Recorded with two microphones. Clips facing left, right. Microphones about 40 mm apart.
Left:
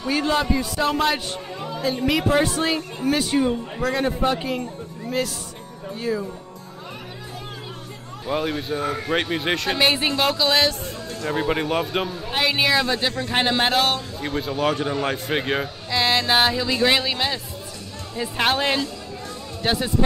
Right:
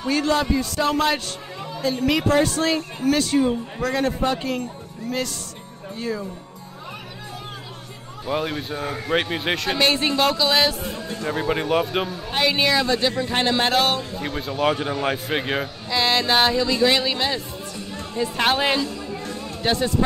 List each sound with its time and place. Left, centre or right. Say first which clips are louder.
0.1 s speech: right 1 dB; centre
8.3 s speech: left 1 dB; centre
16.7 s speech: left 1 dB; centre
17.0 s speech: right 1 dB; centre
19.6 s speech: right 1 dB; centre